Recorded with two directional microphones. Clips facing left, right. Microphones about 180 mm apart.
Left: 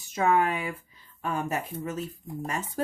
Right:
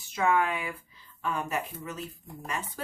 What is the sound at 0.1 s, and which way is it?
Speech, 40° left (ahead or behind).